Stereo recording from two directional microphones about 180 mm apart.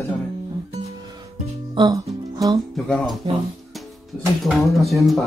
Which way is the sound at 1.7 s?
20° right (ahead or behind).